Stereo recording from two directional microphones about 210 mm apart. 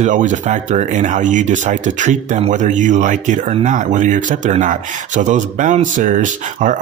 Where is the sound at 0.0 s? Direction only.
35° right (ahead or behind).